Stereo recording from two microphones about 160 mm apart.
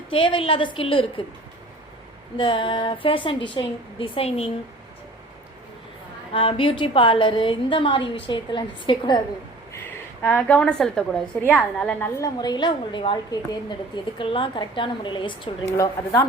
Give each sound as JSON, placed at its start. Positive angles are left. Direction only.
{"t": 0.1, "sound": "a woman's voice", "side_deg": 35}
{"t": 2.4, "sound": "a woman's voice", "side_deg": 30}
{"t": 6.3, "sound": "a woman's voice", "side_deg": 35}
{"t": 9.7, "sound": "a woman's voice", "side_deg": 10}
{"t": 16.0, "sound": "speech", "side_deg": 10}